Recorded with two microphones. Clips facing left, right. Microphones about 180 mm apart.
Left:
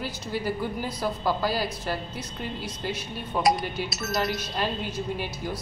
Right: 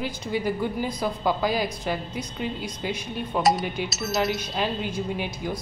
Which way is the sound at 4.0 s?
Centre (ahead or behind).